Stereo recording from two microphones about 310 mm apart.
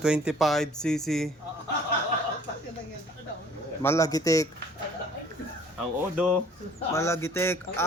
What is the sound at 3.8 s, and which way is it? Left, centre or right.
Speech, centre.